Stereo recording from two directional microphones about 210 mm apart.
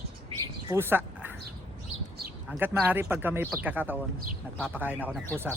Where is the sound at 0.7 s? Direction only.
10° right (ahead or behind).